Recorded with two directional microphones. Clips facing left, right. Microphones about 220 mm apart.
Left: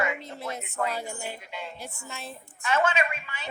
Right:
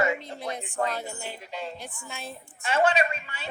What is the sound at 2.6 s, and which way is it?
Speech, 30° right (ahead or behind).